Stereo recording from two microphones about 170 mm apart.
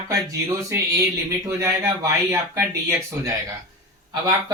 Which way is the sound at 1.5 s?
15° right (ahead or behind).